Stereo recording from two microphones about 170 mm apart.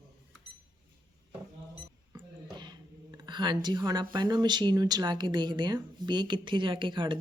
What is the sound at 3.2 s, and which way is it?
Speech, 25° right (ahead or behind).